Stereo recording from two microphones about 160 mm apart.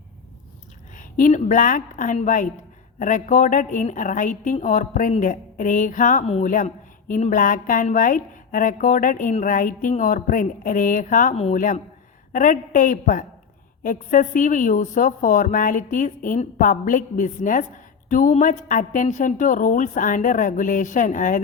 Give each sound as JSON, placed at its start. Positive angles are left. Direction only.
{"t": 0.9, "sound": "a woman's voice", "side_deg": 55}